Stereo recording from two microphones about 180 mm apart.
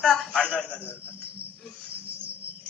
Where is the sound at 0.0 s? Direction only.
5° left (ahead or behind).